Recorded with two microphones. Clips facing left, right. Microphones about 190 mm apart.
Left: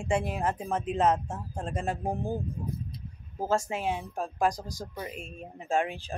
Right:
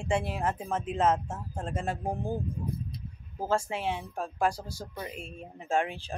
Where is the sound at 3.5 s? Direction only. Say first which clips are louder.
Left 1 dB; 40° left (ahead or behind).